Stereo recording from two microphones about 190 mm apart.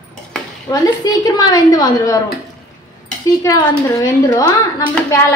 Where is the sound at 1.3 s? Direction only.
20° left (ahead or behind).